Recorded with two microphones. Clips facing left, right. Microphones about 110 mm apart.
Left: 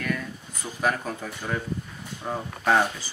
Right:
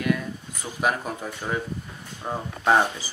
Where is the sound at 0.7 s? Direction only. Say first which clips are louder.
Right 1 dB; 15° right (ahead or behind).